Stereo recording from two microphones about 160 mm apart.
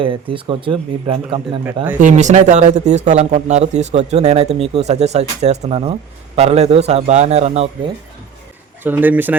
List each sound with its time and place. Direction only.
0.0 s speech: 35° right (ahead or behind)
1.6 s speech: 10° right (ahead or behind)
2.0 s speech: 50° right (ahead or behind)
8.8 s speech: 10° right (ahead or behind)